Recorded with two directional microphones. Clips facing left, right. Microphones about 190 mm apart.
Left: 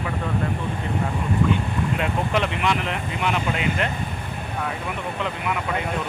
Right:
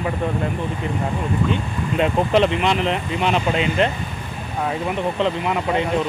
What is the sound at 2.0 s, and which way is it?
Speech, 25° right (ahead or behind).